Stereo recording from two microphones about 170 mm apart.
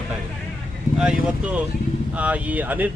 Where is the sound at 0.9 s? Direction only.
5° right (ahead or behind).